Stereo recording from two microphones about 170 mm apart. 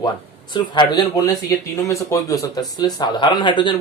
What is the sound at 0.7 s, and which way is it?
Speech, 25° left (ahead or behind).